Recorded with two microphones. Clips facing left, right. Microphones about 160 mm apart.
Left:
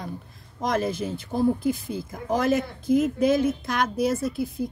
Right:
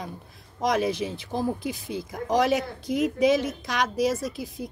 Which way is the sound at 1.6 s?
45° left (ahead or behind).